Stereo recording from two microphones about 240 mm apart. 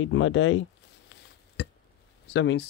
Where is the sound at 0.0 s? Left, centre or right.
Left.